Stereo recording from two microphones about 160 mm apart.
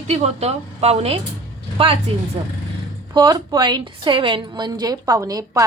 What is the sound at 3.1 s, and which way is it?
A woman's voice, 25° right (ahead or behind).